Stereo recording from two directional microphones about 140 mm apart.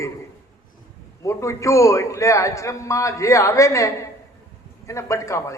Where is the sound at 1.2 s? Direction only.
20° left (ahead or behind).